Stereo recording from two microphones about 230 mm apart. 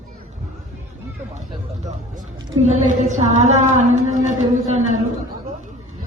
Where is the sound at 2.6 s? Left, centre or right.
Right.